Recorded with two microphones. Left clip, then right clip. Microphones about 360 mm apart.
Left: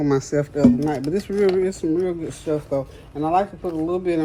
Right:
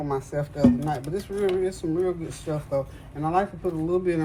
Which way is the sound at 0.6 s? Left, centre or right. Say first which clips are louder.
Left 3 dB; left.